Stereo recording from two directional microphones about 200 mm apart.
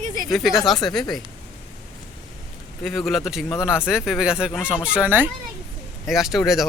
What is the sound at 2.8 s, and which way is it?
Speech, centre (ahead or behind).